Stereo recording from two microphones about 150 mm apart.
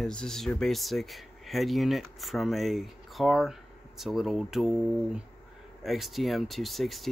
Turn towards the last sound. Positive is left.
turn(degrees=0)  # may be behind; listen again after turning